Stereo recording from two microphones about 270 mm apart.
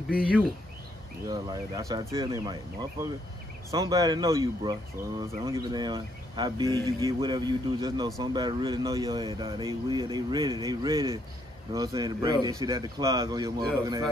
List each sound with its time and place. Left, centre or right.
0.1 s speech: centre